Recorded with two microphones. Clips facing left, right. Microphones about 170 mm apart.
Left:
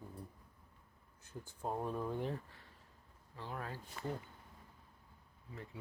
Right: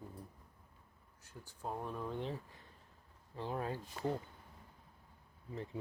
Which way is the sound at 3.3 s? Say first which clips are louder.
Right 6 dB; 20° right (ahead or behind).